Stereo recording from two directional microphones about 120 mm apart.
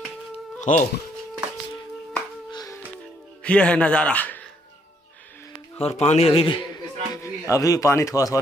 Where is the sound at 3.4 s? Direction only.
10° left (ahead or behind).